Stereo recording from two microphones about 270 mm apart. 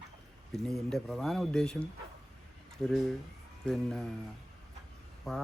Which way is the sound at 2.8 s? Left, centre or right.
Centre.